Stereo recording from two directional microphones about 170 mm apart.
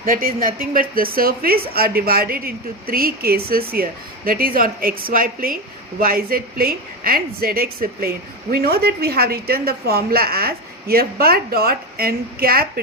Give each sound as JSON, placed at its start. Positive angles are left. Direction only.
{"t": 0.0, "sound": "a woman's voice", "side_deg": -55}